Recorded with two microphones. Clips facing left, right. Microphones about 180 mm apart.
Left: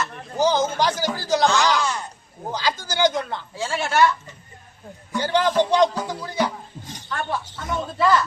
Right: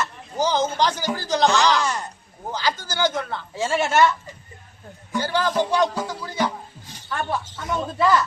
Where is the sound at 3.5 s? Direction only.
20° right (ahead or behind).